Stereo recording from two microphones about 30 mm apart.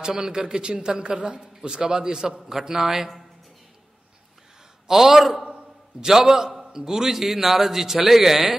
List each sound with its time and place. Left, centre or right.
0.0 s a man's voice: right
4.8 s a man's voice: centre
5.9 s a man's voice: centre